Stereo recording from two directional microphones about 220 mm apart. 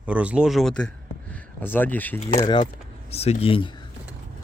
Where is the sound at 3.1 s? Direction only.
30° left (ahead or behind).